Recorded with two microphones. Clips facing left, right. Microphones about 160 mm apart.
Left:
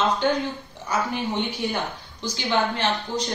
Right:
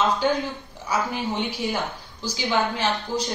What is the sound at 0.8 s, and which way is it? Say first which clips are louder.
A woman's voice: even; 10° right (ahead or behind).